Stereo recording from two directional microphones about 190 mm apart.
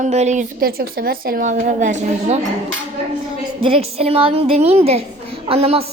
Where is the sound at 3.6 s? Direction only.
30° right (ahead or behind).